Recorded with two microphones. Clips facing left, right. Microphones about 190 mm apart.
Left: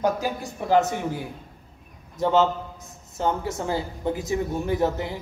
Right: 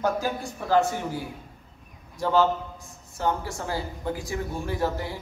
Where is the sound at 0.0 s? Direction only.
15° left (ahead or behind).